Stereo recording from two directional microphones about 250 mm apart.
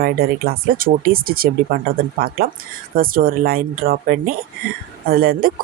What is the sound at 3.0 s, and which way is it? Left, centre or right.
Speech, right.